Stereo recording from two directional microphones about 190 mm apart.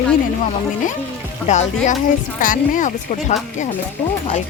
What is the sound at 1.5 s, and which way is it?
Speech, 40° left (ahead or behind).